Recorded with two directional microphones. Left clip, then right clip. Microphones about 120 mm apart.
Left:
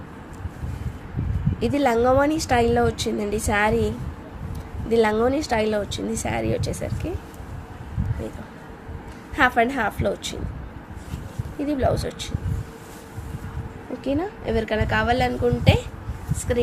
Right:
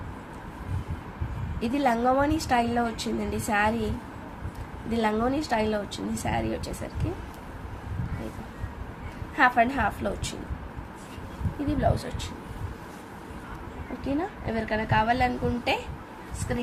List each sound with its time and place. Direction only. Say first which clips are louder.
1.6 s a woman's voice: left 5 dB; 60° left (ahead or behind)
4.9 s a woman's voice: left 7 dB; 50° left (ahead or behind); by 6.9 s 65° left (ahead or behind)
9.3 s a woman's voice: left 2 dB; 70° left (ahead or behind)
11.7 s a woman's voice: left 4 dB; 55° left (ahead or behind)
14.0 s a woman's voice: left 5 dB; 90° left